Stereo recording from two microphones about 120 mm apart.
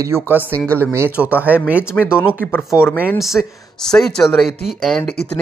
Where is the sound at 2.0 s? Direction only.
10° left (ahead or behind).